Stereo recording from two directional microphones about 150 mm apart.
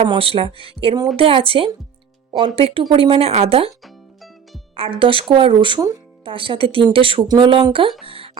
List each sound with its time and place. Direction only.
0.0 s speech: 40° right (ahead or behind)
3.8 s music: centre (ahead or behind)
4.8 s speech: 35° right (ahead or behind)
8.0 s a sound: 35° right (ahead or behind)